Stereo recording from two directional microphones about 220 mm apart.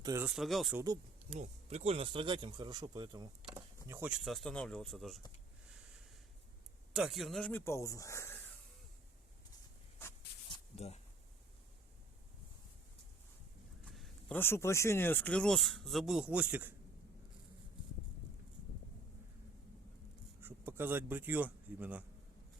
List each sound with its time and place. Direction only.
0.0 s speech: 15° right (ahead or behind)
0.3 s speech: centre (ahead or behind)
1.3 s speech: 25° right (ahead or behind); by 5.2 s centre (ahead or behind)
6.9 s speech: centre (ahead or behind)
10.8 s speech: 30° left (ahead or behind)
13.9 s speech: centre (ahead or behind)
20.4 s speech: 10° right (ahead or behind)